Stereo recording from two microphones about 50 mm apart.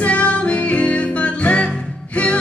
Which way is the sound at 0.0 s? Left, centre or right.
Left.